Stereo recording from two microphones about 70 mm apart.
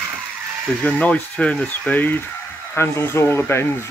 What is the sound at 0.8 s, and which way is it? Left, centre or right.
Speech, left.